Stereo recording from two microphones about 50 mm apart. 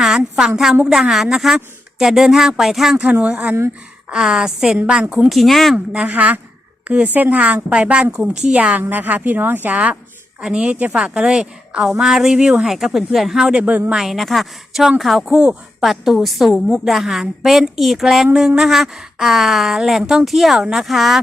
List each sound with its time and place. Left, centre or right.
0.3 s a woman's voice: centre
3.1 s a woman's voice: right
4.1 s speech: centre
5.3 s a woman's voice: centre
5.7 s a woman's voice: right
6.1 s a woman's voice: right; by 8.5 s centre
8.5 s a woman's voice: right
10.7 s a woman's voice: right; by 13.4 s centre
13.6 s speech: right
13.9 s a woman's voice: centre